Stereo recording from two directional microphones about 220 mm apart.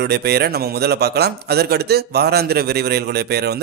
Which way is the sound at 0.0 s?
45° right (ahead or behind).